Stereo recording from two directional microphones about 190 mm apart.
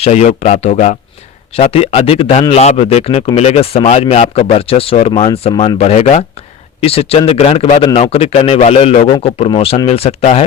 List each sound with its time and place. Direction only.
0.0 s speech: 35° left (ahead or behind)